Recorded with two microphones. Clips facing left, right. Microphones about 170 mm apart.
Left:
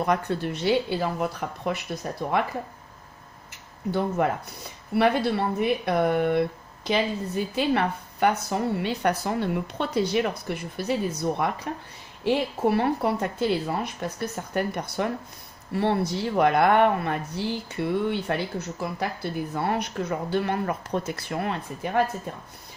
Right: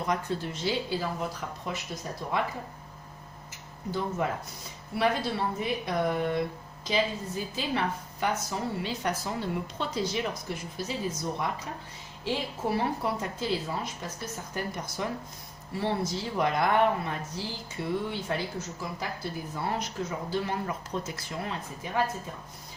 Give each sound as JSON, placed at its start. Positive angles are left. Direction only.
{"t": 0.0, "sound": "speech", "side_deg": 60}
{"t": 4.2, "sound": "speech", "side_deg": 60}